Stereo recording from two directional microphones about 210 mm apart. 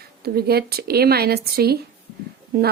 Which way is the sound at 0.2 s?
50° right (ahead or behind).